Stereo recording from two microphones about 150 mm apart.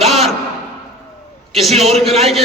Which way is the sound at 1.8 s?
45° right (ahead or behind).